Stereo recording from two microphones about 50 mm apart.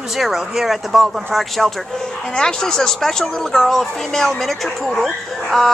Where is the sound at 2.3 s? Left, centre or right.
Centre.